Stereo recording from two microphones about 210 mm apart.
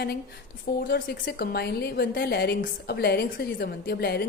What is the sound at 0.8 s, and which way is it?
A woman's voice, 50° left (ahead or behind).